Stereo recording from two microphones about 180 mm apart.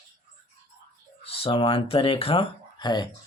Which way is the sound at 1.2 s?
30° left (ahead or behind).